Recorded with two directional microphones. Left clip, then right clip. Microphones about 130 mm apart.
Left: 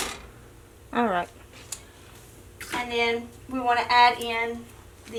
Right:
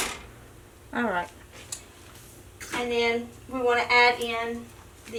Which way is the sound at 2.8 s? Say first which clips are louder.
Even; 20° left (ahead or behind).